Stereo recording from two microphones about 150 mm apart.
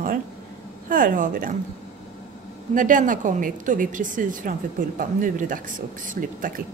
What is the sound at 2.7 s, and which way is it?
Speech, 60° right (ahead or behind).